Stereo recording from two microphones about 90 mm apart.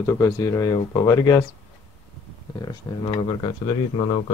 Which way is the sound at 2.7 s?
60° left (ahead or behind).